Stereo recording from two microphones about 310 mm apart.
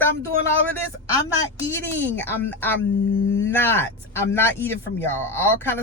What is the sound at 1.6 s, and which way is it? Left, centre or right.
Speech, centre.